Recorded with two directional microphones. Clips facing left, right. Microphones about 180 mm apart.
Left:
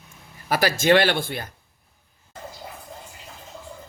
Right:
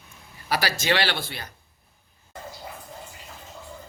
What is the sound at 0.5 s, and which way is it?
Speech, 50° left (ahead or behind).